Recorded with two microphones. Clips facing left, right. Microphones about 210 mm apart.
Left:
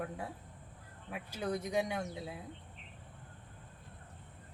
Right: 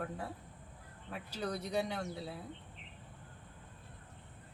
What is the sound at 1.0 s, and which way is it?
Speech, 10° left (ahead or behind).